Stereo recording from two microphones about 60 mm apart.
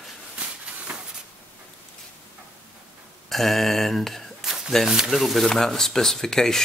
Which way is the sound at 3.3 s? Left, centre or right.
Centre.